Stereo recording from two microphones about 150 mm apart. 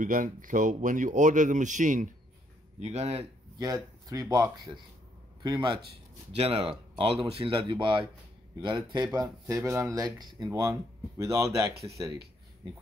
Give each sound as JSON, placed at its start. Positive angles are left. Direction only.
{"t": 0.0, "sound": "speech", "side_deg": -60}
{"t": 3.2, "sound": "speech", "side_deg": -25}
{"t": 6.3, "sound": "speech", "side_deg": -40}
{"t": 9.1, "sound": "speech", "side_deg": -25}